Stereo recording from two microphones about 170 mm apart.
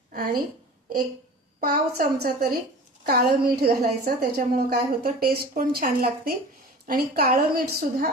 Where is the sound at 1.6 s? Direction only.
60° right (ahead or behind).